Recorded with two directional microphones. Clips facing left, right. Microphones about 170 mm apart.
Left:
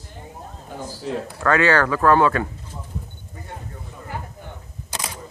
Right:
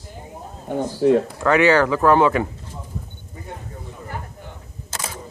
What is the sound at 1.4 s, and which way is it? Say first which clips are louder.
Speech: left 1 dB; 15° right (ahead or behind).